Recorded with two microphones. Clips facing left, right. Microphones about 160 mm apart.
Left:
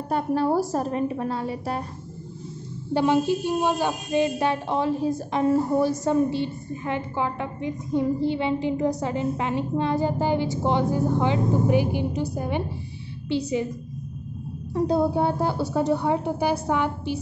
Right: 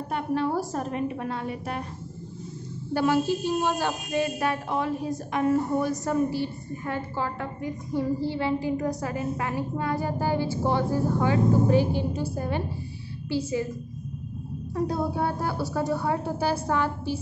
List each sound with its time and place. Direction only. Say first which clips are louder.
0.1 s a woman's voice: left 4 dB; 35° left (ahead or behind)
2.9 s speech: left 2 dB; 20° left (ahead or behind)
14.7 s speech: left 5 dB; 25° left (ahead or behind)